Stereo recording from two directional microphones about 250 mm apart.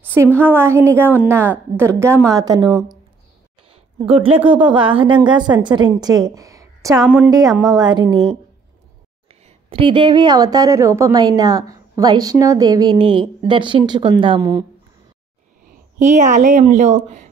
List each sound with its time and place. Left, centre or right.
0.0 s a sound: centre
0.4 s a woman's voice: centre
3.7 s a sound: right
4.5 s a woman's voice: centre
9.3 s a woman's voice: right
16.0 s a woman's voice: right